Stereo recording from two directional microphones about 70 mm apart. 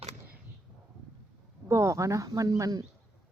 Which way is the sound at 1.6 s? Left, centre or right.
Right.